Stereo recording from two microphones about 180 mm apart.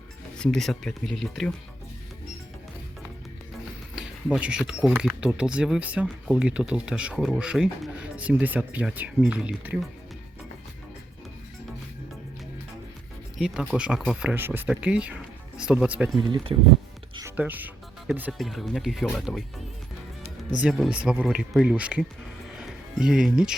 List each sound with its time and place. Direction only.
0.3 s speech: 5° left (ahead or behind)
3.9 s speech: 5° right (ahead or behind)
13.4 s speech: 5° right (ahead or behind)
16.1 s speech: 25° right (ahead or behind)
17.2 s music: 10° right (ahead or behind)
18.1 s speech: centre (ahead or behind)
20.6 s speech: centre (ahead or behind)